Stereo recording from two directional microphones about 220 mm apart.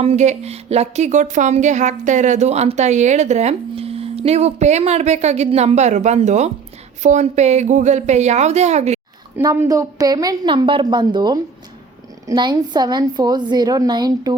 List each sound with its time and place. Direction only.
0.0 s speech: 30° right (ahead or behind)
9.4 s a woman's voice: 15° right (ahead or behind)